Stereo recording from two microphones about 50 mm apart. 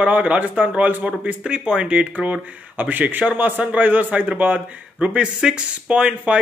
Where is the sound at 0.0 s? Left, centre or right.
Right.